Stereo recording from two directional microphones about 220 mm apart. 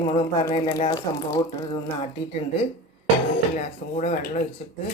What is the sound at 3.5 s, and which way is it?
Speech, 35° left (ahead or behind).